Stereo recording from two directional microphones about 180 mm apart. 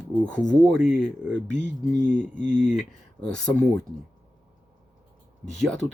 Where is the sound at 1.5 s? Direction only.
40° left (ahead or behind).